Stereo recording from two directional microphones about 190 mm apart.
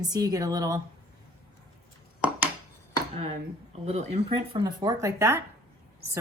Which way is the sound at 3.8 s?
35° right (ahead or behind).